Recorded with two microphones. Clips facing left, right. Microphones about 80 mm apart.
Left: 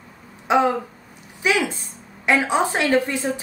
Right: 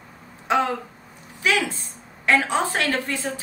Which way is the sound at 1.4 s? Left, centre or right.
Centre.